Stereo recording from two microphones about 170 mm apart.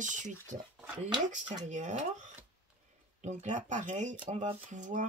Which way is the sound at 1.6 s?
45° right (ahead or behind).